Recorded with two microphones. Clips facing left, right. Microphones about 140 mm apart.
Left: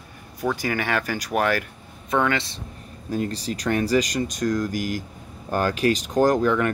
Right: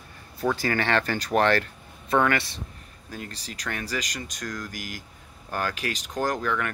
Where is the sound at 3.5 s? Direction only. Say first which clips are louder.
Left 10 dB; 35° left (ahead or behind).